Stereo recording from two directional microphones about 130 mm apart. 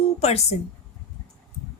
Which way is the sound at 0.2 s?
55° left (ahead or behind).